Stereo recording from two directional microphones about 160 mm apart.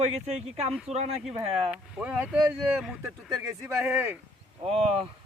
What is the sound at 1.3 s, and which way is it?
Speech, 5° right (ahead or behind).